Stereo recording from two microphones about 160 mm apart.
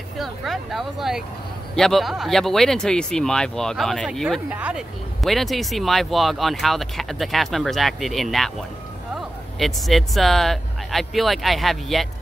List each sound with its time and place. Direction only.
0.2 s speech: centre (ahead or behind)